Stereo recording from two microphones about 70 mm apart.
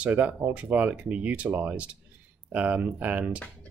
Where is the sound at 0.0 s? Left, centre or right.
Right.